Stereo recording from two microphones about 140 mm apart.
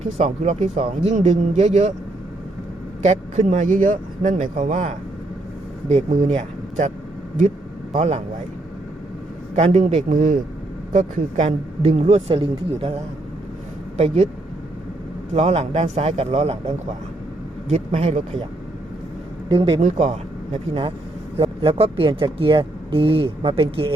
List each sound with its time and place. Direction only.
0.0 s speech: 50° right (ahead or behind)
3.0 s a man's voice: 55° right (ahead or behind)
6.3 s a sound: 55° right (ahead or behind)
7.9 s speech: 50° right (ahead or behind)
9.6 s a man's voice: 50° right (ahead or behind)
12.3 s speech: 40° right (ahead or behind)
15.3 s speech: 50° right (ahead or behind)
19.5 s speech: 40° right (ahead or behind)
19.8 s speech: 55° right (ahead or behind)
21.3 s speech: 40° right (ahead or behind)